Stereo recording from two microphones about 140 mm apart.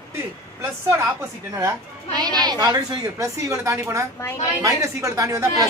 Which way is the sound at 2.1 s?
30° right (ahead or behind).